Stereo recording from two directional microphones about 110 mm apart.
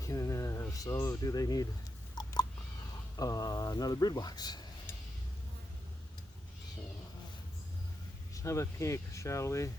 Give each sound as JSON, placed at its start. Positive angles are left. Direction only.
{"t": 0.0, "sound": "a sound", "side_deg": 30}
{"t": 3.2, "sound": "speech", "side_deg": 35}
{"t": 8.3, "sound": "speech", "side_deg": 30}